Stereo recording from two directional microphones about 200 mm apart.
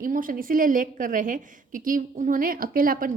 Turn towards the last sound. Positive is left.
turn(degrees=-45)  # may be behind; listen again after turning